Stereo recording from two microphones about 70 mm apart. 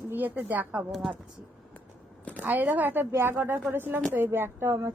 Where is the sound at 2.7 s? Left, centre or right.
Right.